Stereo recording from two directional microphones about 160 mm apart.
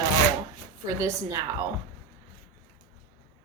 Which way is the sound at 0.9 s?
20° right (ahead or behind).